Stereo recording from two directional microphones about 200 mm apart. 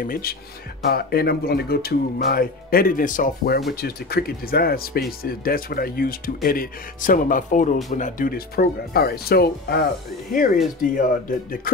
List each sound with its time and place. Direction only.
0.0 s speech: 45° left (ahead or behind)